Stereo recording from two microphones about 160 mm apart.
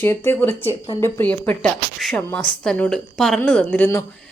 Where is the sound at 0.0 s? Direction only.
15° left (ahead or behind).